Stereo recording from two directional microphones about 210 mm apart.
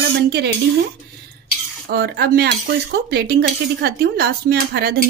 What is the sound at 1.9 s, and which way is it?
Cutlery, 50° right (ahead or behind).